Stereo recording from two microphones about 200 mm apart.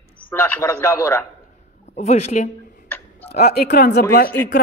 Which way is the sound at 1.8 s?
35° left (ahead or behind).